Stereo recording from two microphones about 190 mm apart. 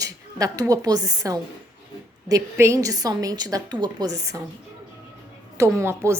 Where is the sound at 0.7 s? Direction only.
20° right (ahead or behind).